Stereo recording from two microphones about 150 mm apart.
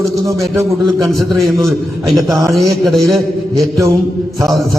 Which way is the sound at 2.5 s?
Centre (ahead or behind).